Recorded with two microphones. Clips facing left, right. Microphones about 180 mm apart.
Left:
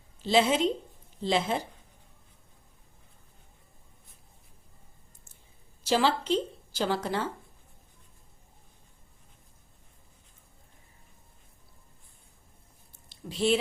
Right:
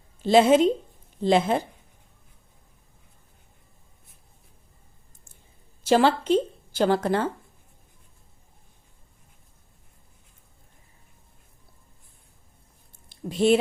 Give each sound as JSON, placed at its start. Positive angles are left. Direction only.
{"t": 0.2, "sound": "a woman's voice", "side_deg": -50}
{"t": 5.8, "sound": "a woman's voice", "side_deg": -55}
{"t": 13.1, "sound": "speech", "side_deg": -50}